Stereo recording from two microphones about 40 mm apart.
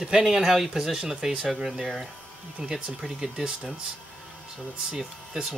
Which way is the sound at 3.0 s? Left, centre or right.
Centre.